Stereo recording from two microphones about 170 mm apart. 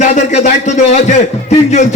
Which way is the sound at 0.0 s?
45° left (ahead or behind).